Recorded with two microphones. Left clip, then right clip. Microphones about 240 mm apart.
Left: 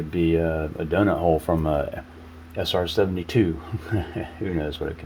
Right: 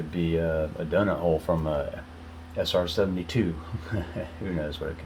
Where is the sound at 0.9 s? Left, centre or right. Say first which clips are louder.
Left 5 dB; left.